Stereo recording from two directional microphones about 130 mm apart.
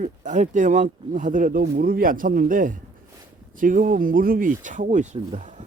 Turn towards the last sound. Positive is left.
turn(degrees=-70)  # may be behind; listen again after turning